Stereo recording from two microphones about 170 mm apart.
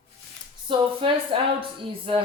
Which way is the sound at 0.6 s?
30° right (ahead or behind).